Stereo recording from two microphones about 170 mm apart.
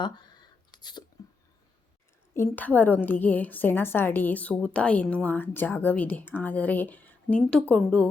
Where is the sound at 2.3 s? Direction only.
10° left (ahead or behind).